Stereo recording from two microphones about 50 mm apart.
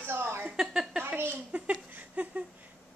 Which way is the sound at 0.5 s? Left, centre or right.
Centre.